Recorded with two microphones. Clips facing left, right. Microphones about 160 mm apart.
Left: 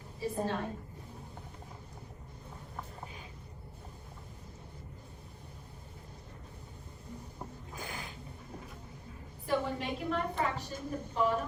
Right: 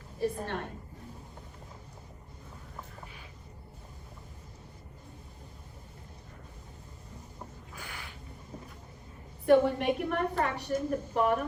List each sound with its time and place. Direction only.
0.4 s a woman's voice: 65° right (ahead or behind)
7.8 s a sound: 30° left (ahead or behind)
9.5 s a woman's voice: 65° right (ahead or behind)